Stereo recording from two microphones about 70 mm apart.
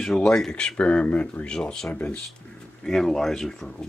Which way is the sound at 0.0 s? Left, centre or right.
Centre.